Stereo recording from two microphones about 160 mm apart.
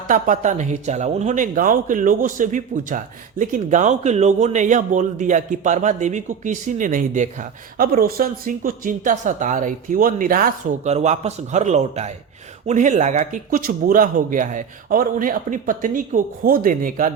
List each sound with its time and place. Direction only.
0.1 s speech: 50° right (ahead or behind)
10.8 s speech: 45° right (ahead or behind); by 17.1 s 60° right (ahead or behind)